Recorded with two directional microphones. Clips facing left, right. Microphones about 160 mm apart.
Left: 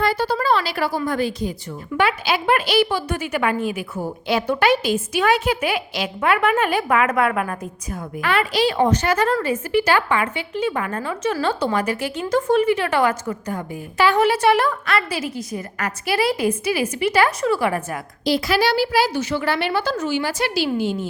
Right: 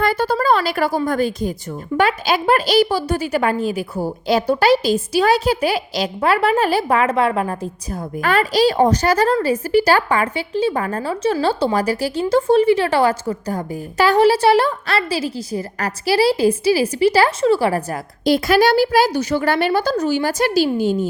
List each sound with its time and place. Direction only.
0.0 s a sound: 50° right (ahead or behind)
1.0 s a woman's voice: 45° right (ahead or behind); by 7.7 s 25° right (ahead or behind)
8.1 s a woman's voice: 40° right (ahead or behind)
18.3 s a woman's voice: 50° right (ahead or behind)